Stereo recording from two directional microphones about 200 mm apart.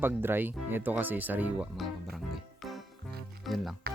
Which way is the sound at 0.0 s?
10° right (ahead or behind).